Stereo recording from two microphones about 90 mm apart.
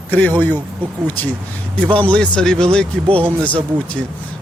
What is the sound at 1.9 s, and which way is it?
A man's voice, 15° left (ahead or behind).